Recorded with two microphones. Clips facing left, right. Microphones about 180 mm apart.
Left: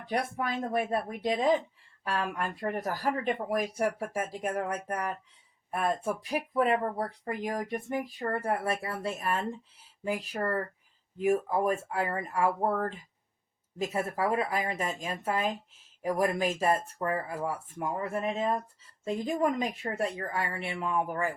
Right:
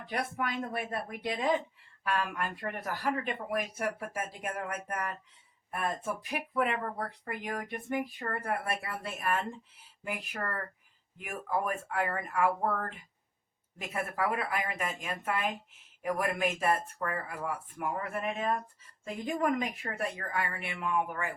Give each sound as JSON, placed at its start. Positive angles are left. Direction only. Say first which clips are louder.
{"t": 0.1, "sound": "speech", "louder": "left 3 dB", "side_deg": 35}
{"t": 6.2, "sound": "speech", "louder": "left 4 dB", "side_deg": 35}